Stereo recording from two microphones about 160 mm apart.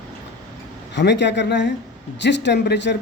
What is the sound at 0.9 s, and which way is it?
Speech, 90° left.